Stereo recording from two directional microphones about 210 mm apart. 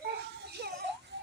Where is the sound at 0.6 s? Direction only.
50° right (ahead or behind).